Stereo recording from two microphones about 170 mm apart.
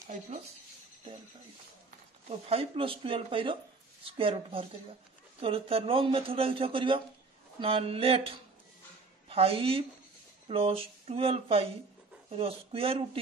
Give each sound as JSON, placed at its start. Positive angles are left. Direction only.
{"t": 2.2, "sound": "a man's voice", "side_deg": -35}
{"t": 9.3, "sound": "a man's voice", "side_deg": -35}